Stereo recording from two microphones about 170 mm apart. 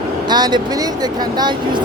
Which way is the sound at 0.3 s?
25° right (ahead or behind).